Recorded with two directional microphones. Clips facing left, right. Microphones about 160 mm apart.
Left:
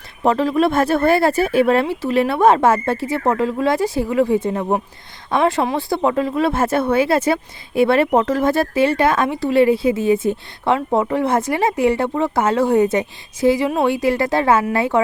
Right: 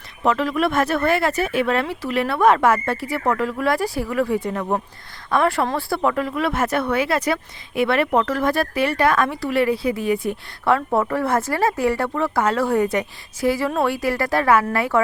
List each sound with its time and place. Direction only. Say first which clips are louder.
0.2 s speech: left 4 dB; 30° left (ahead or behind)